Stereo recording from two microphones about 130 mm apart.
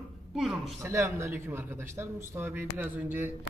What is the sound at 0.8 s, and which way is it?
A man's voice, 20° right (ahead or behind).